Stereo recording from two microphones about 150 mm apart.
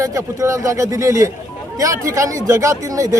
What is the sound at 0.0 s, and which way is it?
Speech, 20° right (ahead or behind).